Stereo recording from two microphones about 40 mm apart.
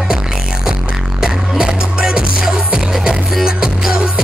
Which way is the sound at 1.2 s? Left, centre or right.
Centre.